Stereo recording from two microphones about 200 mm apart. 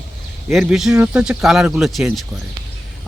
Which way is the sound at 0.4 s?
Centre (ahead or behind).